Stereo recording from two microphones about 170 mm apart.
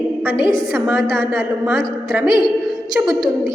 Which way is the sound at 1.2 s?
15° right (ahead or behind).